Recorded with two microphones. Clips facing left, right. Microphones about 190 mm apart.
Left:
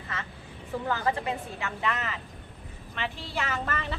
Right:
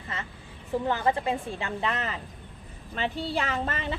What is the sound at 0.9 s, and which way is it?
A woman's voice, 25° right (ahead or behind).